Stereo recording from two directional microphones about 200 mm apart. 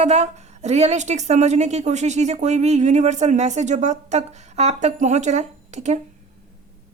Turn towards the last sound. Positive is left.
turn(degrees=-35)  # may be behind; listen again after turning